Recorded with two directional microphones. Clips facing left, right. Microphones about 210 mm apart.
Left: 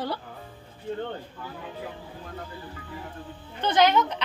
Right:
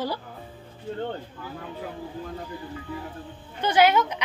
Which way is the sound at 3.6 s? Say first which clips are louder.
Right 1 dB; 10° right (ahead or behind).